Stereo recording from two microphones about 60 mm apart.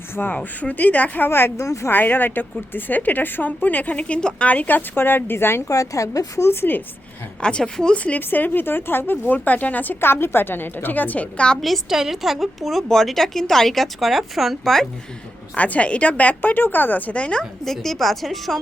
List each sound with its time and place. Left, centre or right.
0.3 s a woman's voice: left
1.3 s a woman's voice: left
1.5 s speech: left
1.9 s a woman's voice: left
5.6 s speech: left
6.5 s a woman's voice: left
7.4 s speech: centre
7.9 s a woman's voice: left
11.6 s a woman's voice: centre
15.5 s a woman's voice: left
17.2 s speech: centre
17.7 s a woman's voice: centre